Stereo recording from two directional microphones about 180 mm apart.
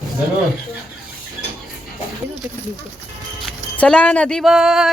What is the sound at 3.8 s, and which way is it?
A woman's voice, 5° left (ahead or behind).